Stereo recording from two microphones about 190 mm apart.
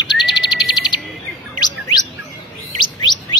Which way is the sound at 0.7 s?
20° left (ahead or behind).